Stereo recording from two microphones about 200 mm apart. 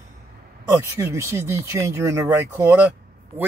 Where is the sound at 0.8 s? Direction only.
15° right (ahead or behind).